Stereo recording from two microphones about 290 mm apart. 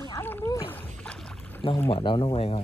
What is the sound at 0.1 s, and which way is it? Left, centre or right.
Splash, centre.